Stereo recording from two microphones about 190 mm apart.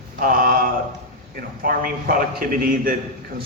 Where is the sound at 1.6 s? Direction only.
50° right (ahead or behind).